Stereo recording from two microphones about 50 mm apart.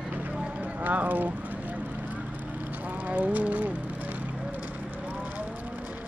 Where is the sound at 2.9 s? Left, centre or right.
Right.